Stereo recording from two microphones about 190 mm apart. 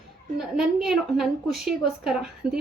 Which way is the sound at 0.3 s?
5° right (ahead or behind).